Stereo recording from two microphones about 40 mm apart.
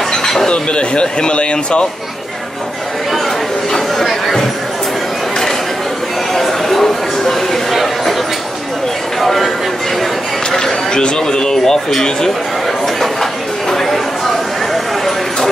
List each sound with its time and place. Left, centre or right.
0.1 s chink: centre
0.5 s speech: left
3.7 s chatter: centre
6.3 s a sound: centre
9.2 s speech: centre
10.5 s speech: centre
12.8 s chatter: centre